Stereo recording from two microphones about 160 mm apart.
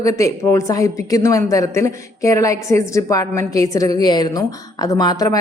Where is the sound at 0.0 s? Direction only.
20° left (ahead or behind).